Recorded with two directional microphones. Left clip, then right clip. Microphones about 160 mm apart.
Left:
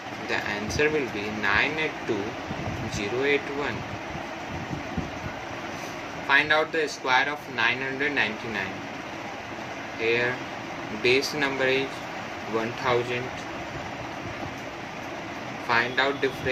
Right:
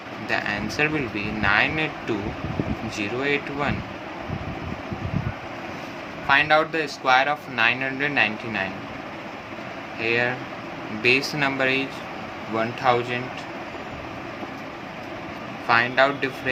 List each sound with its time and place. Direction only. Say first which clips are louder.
0.3 s speech: right 3 dB; 70° right (ahead or behind)
3.0 s speech: even; 70° right (ahead or behind)
6.2 s speech: right 3 dB; 65° right (ahead or behind)
10.0 s speech: right 2 dB; 70° right (ahead or behind)
12.9 s speech: right 4 dB; 70° right (ahead or behind)
15.7 s speech: right 5 dB; 75° right (ahead or behind)